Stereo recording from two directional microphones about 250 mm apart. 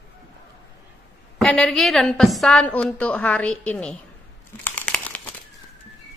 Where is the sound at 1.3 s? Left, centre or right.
Centre.